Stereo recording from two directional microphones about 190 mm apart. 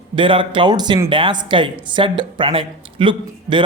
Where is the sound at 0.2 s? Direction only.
25° right (ahead or behind).